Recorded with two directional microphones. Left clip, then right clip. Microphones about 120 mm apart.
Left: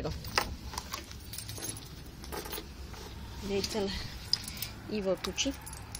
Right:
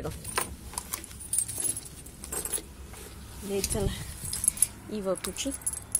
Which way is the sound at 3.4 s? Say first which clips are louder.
Right 2 dB; 20° right (ahead or behind).